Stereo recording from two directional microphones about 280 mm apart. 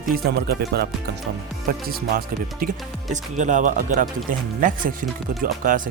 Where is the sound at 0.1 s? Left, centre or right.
Right.